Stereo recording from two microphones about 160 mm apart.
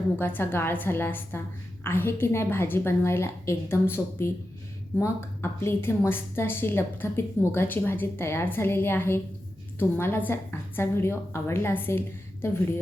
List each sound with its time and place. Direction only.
0.2 s a woman's voice: 15° left (ahead or behind)